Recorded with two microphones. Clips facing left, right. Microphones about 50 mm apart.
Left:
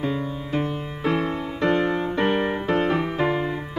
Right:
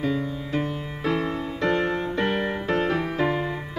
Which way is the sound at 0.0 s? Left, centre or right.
Centre.